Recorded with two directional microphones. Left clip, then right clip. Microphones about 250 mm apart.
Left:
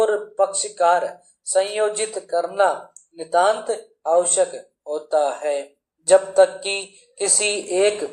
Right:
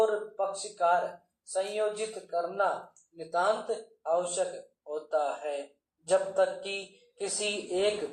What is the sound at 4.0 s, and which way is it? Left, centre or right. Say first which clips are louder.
A man's voice: left 12 dB; left.